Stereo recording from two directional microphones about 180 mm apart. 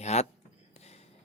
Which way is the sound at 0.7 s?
35° left (ahead or behind).